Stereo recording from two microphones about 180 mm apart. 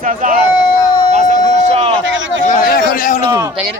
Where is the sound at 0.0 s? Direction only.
45° right (ahead or behind).